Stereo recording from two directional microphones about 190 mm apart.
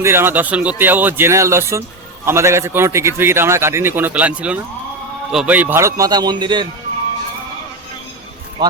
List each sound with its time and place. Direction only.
0.0 s a man's voice: 10° right (ahead or behind)